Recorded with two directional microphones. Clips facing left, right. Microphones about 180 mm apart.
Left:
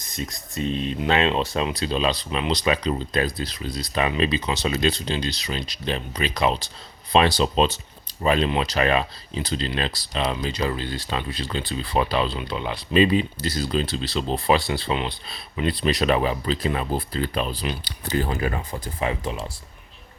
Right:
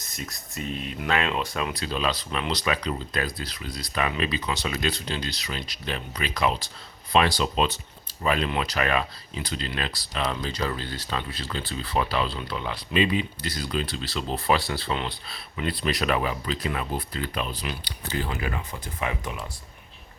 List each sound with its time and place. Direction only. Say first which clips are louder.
0.2 s speech: left 7 dB; 25° left (ahead or behind)
12.9 s speech: left 6 dB; 35° left (ahead or behind)